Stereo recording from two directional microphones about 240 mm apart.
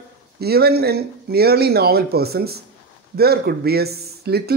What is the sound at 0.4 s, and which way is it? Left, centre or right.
A man's voice, right.